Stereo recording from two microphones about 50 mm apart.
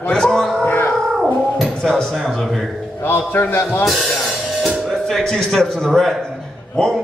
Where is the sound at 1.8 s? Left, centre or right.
Centre.